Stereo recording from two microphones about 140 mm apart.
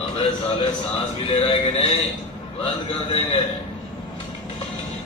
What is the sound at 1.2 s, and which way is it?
A man's voice, 45° left (ahead or behind).